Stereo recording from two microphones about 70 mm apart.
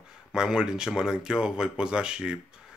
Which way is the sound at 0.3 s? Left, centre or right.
Centre.